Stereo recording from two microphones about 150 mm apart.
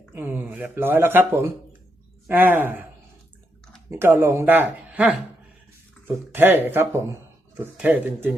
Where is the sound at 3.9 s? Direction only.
15° right (ahead or behind).